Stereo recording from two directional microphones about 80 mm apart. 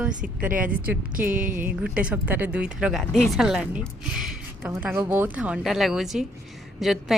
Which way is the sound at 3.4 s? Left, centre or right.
Centre.